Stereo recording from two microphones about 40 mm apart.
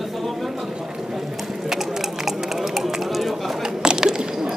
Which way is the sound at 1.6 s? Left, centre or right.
Centre.